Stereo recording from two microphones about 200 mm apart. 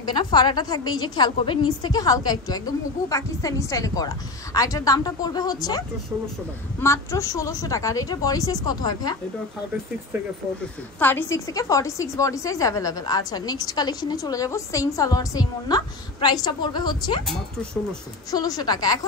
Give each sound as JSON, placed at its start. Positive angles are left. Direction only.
{"t": 0.0, "sound": "a woman's voice", "side_deg": 20}
{"t": 6.8, "sound": "a woman's voice", "side_deg": 15}
{"t": 11.0, "sound": "a woman's voice", "side_deg": 10}
{"t": 18.3, "sound": "a woman's voice", "side_deg": 20}